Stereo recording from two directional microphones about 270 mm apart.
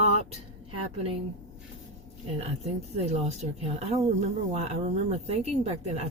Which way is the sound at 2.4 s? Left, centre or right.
Right.